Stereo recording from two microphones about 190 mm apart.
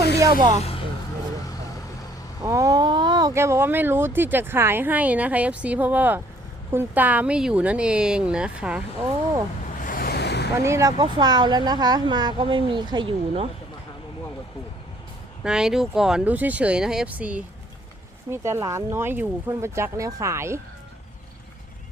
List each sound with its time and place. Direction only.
0.2 s speech: 15° right (ahead or behind)
2.4 s speech: 15° right (ahead or behind)
9.8 s waves: 50° left (ahead or behind)
10.6 s speech: 15° right (ahead or behind); by 13.5 s 30° right (ahead or behind)
15.4 s speech: 5° right (ahead or behind)